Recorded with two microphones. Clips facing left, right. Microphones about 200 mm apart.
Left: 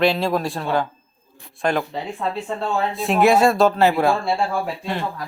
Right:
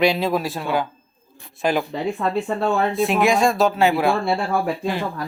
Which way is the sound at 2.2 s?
55° right (ahead or behind).